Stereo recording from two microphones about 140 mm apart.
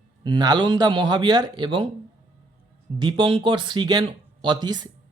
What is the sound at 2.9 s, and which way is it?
Speech, 35° right (ahead or behind).